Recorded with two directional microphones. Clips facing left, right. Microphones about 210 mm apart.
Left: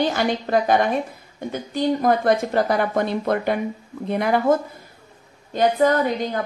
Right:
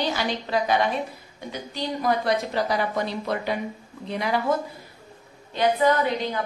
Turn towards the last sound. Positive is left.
turn(degrees=45)  # may be behind; listen again after turning